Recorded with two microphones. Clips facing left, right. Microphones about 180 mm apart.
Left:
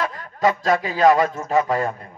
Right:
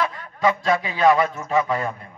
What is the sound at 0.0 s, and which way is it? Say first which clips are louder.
A man's voice: left 1 dB; 45° left (ahead or behind).